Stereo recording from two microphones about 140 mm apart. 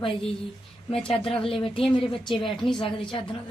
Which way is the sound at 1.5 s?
40° left (ahead or behind).